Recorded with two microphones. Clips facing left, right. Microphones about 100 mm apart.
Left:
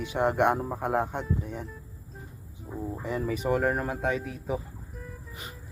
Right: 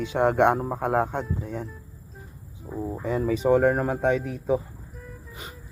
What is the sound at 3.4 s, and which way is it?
Speech, 30° right (ahead or behind).